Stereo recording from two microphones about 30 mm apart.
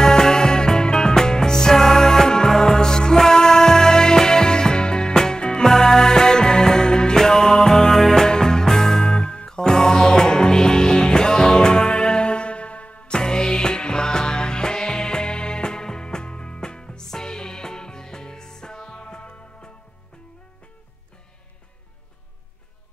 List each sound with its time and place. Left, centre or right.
0.0 s music: left
8.3 s music: left
13.1 s music: left
17.0 s music: centre